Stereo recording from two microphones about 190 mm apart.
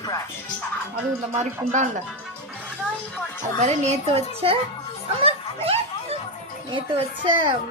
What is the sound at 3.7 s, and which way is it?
Speech, 35° right (ahead or behind).